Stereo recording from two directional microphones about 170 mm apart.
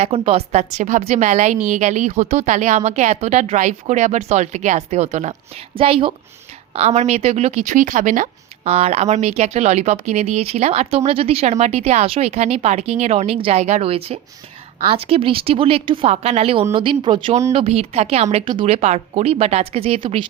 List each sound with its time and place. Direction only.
0.0 s a woman's voice: 35° right (ahead or behind)